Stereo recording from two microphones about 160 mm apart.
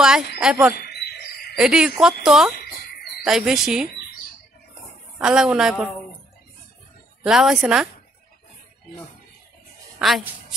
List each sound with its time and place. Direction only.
0.4 s speech: 5° right (ahead or behind)
0.7 s cricket: 90° left
1.6 s speech: 5° right (ahead or behind)
2.5 s a sound: 85° left
3.3 s speech: 5° right (ahead or behind)
5.2 s speech: 5° right (ahead or behind)
7.2 s speech: 5° right (ahead or behind)
9.9 s a woman's voice: centre (ahead or behind)